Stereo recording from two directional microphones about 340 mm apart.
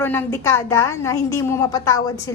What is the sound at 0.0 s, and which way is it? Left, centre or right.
A woman's voice, centre.